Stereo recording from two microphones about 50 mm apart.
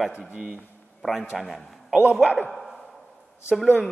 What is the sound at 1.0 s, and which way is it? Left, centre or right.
Speech, centre.